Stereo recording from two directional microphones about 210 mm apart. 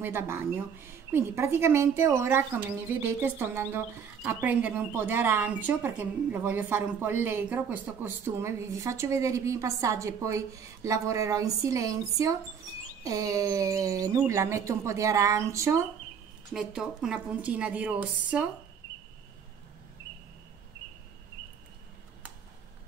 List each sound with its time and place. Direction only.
0.0 s a woman's voice: 10° right (ahead or behind)
16.5 s a woman's voice: 5° right (ahead or behind)